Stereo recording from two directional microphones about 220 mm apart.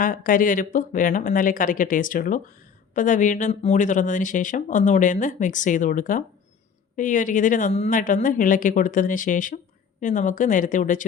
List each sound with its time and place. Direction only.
0.0 s speech: 40° left (ahead or behind)